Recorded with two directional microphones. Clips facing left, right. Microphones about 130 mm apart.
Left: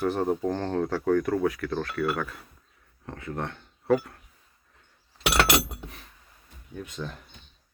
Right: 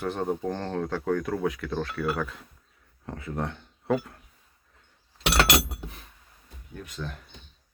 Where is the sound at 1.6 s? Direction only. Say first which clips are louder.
Left 2 dB; 5° right (ahead or behind).